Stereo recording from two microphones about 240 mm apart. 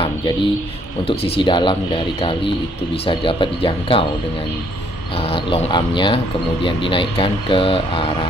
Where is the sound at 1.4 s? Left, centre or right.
Centre.